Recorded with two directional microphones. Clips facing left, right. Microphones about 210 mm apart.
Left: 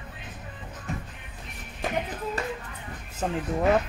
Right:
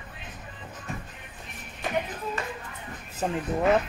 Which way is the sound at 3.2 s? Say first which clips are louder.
Even; 5° right (ahead or behind).